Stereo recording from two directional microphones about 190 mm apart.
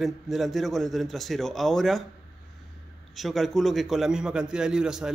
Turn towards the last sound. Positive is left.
turn(degrees=-5)  # may be behind; listen again after turning